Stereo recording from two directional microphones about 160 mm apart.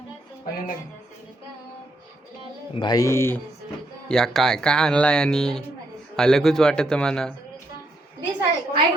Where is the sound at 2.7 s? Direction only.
25° left (ahead or behind).